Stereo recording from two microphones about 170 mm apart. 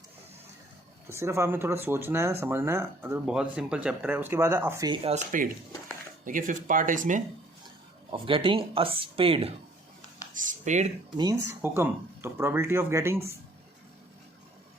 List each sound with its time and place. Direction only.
1.0 s speech: 15° right (ahead or behind)
4.9 s speech: 35° right (ahead or behind)
6.2 s speech: 50° right (ahead or behind)
8.1 s speech: 30° right (ahead or behind)
10.5 s speech: 45° right (ahead or behind)
11.2 s speech: 20° right (ahead or behind)